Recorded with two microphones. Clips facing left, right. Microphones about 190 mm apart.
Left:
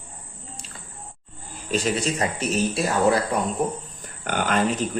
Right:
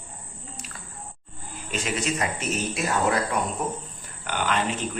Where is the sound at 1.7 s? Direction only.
35° left (ahead or behind).